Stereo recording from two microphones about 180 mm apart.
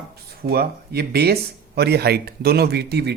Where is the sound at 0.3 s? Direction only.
60° right (ahead or behind).